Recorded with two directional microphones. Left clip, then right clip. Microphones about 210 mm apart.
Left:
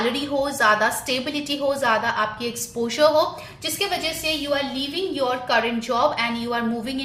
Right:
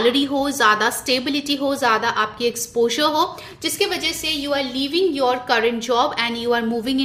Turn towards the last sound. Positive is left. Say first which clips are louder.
# right 5 dB
turn(degrees=-50)  # may be behind; listen again after turning